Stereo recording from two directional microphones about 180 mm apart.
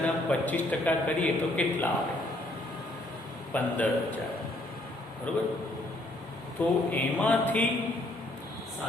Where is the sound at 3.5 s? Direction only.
10° left (ahead or behind).